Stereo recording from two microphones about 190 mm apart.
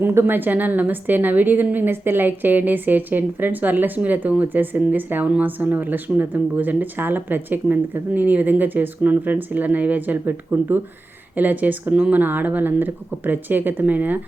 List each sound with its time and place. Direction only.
0.0 s a woman's voice: 10° right (ahead or behind)